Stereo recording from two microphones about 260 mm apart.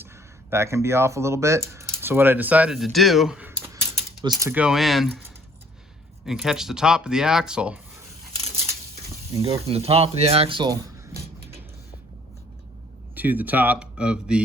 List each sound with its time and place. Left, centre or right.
0.5 s speech: centre
6.2 s speech: centre
9.4 s speech: right
13.1 s speech: centre